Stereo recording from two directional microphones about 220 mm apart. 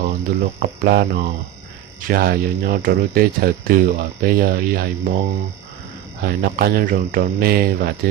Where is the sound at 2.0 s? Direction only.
45° right (ahead or behind).